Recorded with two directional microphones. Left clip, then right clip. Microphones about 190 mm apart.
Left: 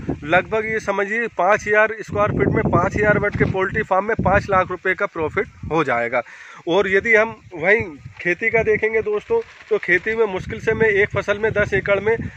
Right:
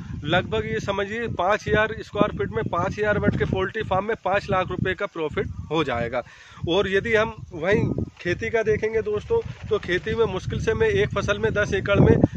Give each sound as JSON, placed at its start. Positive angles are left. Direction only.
{"t": 0.3, "sound": "speech", "side_deg": 45}